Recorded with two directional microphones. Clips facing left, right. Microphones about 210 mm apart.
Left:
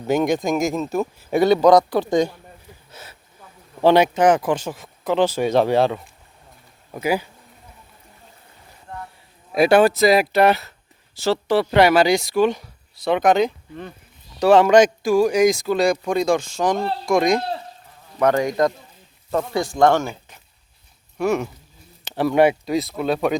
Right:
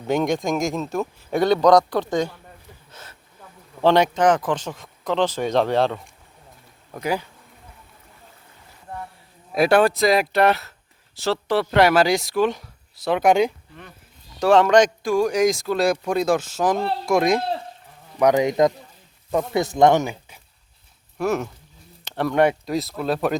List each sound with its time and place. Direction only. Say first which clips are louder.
0.0 s speech: left 2 dB; 5° left (ahead or behind)
2.9 s a sound: left 3 dB; 10° left (ahead or behind)
3.8 s speech: left 2 dB; 10° left (ahead or behind)
9.5 s speech: left 2 dB; centre (ahead or behind)
14.3 s speech: left 2 dB; 5° left (ahead or behind)
18.2 s speech: right 1 dB; 15° right (ahead or behind)
21.2 s speech: left 2 dB; centre (ahead or behind)